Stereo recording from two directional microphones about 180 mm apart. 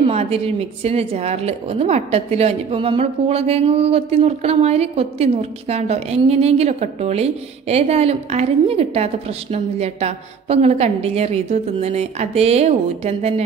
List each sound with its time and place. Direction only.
0.0 s a woman's voice: 35° right (ahead or behind)